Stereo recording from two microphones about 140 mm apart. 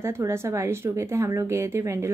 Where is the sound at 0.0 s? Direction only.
20° right (ahead or behind).